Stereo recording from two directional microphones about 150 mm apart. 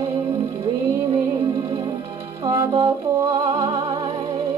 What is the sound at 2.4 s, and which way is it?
Music, 20° right (ahead or behind).